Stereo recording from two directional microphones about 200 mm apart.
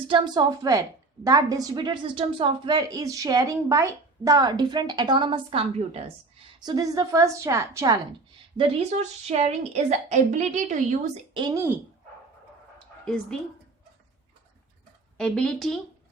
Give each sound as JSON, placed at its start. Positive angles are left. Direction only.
{"t": 0.1, "sound": "a woman's voice", "side_deg": -20}
{"t": 6.7, "sound": "a woman's voice", "side_deg": -15}
{"t": 8.5, "sound": "a woman's voice", "side_deg": -30}
{"t": 11.3, "sound": "a woman's voice", "side_deg": -20}
{"t": 13.1, "sound": "speech", "side_deg": 5}
{"t": 15.2, "sound": "speech", "side_deg": 5}